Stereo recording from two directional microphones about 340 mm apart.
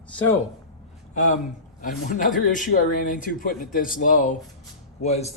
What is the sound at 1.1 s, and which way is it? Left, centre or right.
Speech, left.